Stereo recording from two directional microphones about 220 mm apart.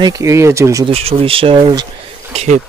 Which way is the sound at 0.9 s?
25° right (ahead or behind).